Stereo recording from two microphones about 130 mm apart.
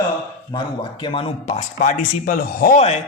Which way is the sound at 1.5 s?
65° left (ahead or behind).